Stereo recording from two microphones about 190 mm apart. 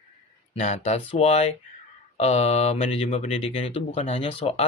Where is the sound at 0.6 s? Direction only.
35° left (ahead or behind).